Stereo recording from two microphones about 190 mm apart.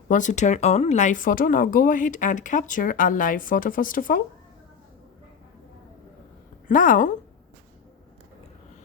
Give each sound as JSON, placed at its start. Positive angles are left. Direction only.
{"t": 0.1, "sound": "speech", "side_deg": 40}
{"t": 6.7, "sound": "speech", "side_deg": 45}